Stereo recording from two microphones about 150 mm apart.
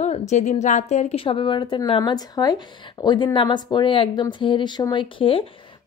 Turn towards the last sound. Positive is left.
turn(degrees=35)  # may be behind; listen again after turning